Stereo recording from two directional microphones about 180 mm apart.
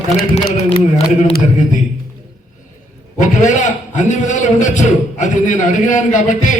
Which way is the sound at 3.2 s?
40° left (ahead or behind).